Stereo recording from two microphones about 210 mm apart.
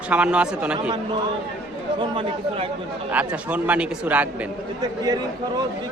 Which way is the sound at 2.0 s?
25° right (ahead or behind).